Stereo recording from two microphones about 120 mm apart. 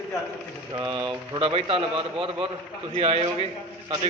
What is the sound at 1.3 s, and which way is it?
A man's voice, 45° right (ahead or behind).